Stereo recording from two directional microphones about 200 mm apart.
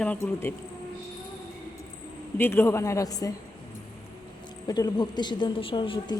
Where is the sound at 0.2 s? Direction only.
10° left (ahead or behind).